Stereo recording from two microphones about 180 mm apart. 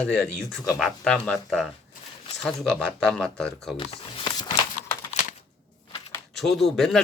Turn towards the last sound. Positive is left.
turn(degrees=0)  # may be behind; listen again after turning